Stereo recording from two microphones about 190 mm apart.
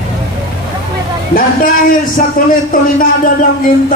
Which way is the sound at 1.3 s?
50° left (ahead or behind).